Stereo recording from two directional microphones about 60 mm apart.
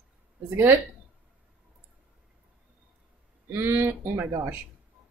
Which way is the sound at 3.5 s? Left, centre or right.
Right.